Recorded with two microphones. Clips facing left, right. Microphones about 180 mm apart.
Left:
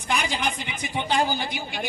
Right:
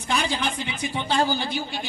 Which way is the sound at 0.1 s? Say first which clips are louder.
Right 1 dB; 15° left (ahead or behind).